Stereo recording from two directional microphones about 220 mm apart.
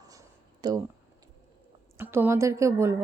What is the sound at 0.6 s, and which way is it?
Speech, 20° right (ahead or behind).